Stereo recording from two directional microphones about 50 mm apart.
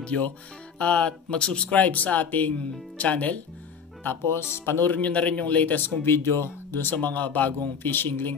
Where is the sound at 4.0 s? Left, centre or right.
Left.